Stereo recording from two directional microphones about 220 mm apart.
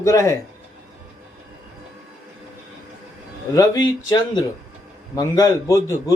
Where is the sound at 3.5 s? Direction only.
15° left (ahead or behind).